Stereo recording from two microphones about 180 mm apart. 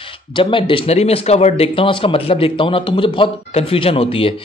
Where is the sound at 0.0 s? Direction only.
30° left (ahead or behind).